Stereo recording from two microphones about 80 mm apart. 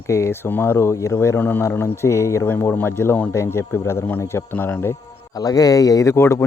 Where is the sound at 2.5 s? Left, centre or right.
Left.